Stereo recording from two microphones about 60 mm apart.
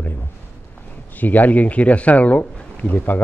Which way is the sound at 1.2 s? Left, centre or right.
Left.